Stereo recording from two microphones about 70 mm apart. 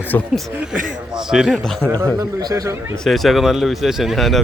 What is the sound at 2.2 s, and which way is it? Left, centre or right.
Speech, right.